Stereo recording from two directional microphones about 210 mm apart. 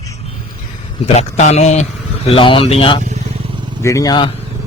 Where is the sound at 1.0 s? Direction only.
30° left (ahead or behind).